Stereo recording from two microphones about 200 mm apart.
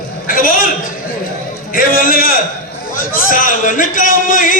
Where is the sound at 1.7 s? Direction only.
45° left (ahead or behind).